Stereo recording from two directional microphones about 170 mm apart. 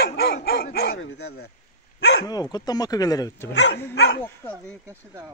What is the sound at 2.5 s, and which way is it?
Speech, 25° left (ahead or behind).